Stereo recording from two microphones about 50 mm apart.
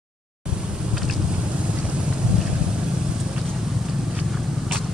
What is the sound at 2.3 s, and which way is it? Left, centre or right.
Boat, centre.